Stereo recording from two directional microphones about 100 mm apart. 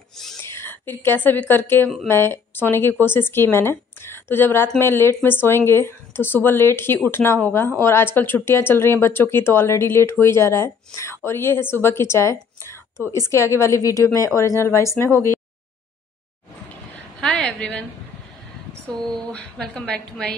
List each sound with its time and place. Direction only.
0.4 s a woman's voice: 25° left (ahead or behind)
16.9 s a sound: 5° left (ahead or behind)
18.9 s a woman's voice: 10° left (ahead or behind)